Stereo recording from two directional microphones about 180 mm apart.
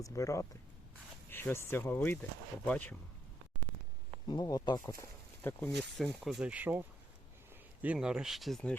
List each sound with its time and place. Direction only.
0.0 s speech: 15° left (ahead or behind)
4.3 s speech: 20° left (ahead or behind)
5.4 s speech: 10° left (ahead or behind)
6.0 s speech: centre (ahead or behind)